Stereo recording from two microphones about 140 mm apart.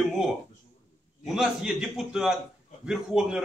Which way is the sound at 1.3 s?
Centre (ahead or behind).